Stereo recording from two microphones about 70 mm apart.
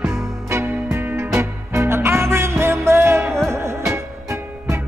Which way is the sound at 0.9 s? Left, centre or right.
Right.